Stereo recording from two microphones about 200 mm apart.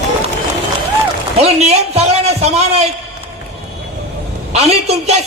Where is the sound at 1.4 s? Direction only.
30° right (ahead or behind).